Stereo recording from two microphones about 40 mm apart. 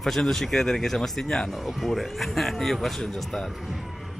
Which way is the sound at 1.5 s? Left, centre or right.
Centre.